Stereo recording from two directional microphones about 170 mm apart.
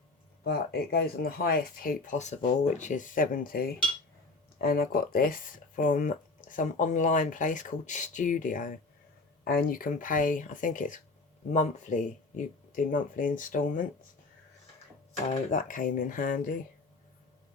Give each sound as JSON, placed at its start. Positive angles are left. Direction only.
{"t": 0.4, "sound": "speech", "side_deg": 70}
{"t": 15.3, "sound": "speech", "side_deg": 45}